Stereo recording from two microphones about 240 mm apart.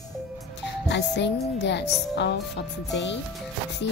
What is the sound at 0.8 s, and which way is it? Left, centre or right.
Music, left.